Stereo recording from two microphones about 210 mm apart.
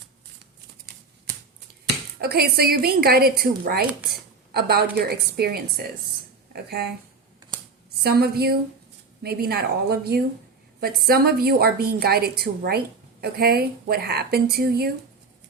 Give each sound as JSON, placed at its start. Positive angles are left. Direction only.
{"t": 2.2, "sound": "a woman's voice", "side_deg": -45}
{"t": 8.0, "sound": "a woman's voice", "side_deg": -50}